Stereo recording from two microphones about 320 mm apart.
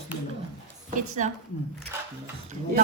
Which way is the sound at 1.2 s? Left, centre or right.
Right.